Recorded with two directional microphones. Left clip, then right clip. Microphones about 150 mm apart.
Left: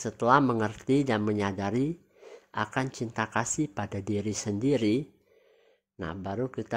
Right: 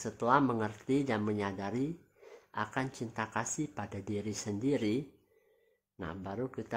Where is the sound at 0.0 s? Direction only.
40° left (ahead or behind).